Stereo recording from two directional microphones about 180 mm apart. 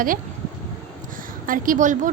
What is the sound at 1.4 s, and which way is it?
Speech, 50° right (ahead or behind).